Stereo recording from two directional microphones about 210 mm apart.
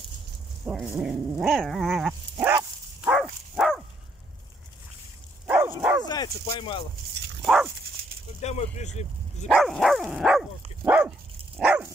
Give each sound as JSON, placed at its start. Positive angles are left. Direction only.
{"t": 0.7, "sound": "dog", "side_deg": -5}
{"t": 5.5, "sound": "dog", "side_deg": -10}
{"t": 6.0, "sound": "speech", "side_deg": 20}
{"t": 7.4, "sound": "dog", "side_deg": -5}
{"t": 8.4, "sound": "speech", "side_deg": 30}
{"t": 9.5, "sound": "dog", "side_deg": 0}